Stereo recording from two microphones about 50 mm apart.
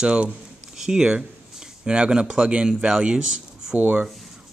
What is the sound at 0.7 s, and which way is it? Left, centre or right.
Speech, centre.